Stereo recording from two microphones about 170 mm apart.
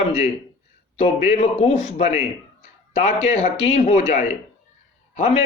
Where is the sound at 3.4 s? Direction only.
40° left (ahead or behind).